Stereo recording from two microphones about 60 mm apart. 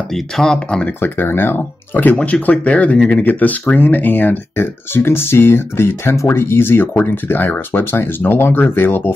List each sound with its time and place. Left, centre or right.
0.1 s speech: centre
1.0 s speech: left
2.1 s speech: centre; by 9.1 s left